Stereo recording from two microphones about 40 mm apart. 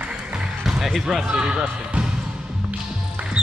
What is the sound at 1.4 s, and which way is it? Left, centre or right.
Music, right.